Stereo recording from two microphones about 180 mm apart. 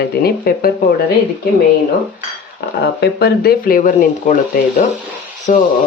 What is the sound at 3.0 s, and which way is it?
Speech, 65° left (ahead or behind).